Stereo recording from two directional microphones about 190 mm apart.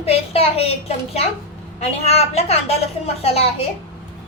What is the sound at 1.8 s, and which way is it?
A woman's voice, 35° left (ahead or behind).